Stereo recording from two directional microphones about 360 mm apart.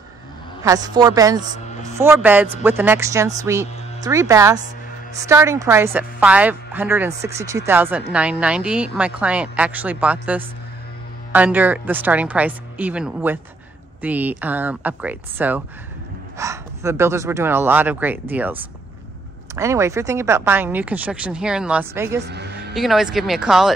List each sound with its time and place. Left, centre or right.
0.7 s a woman's voice: centre
22.2 s speech: right
22.8 s a woman's voice: centre